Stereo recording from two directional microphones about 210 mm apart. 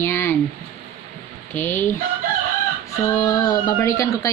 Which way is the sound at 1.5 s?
10° left (ahead or behind).